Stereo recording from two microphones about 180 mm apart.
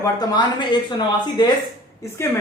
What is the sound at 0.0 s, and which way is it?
Speech, 25° left (ahead or behind).